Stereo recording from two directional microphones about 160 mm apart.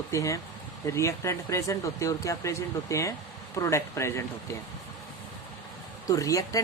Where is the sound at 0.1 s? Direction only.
20° left (ahead or behind).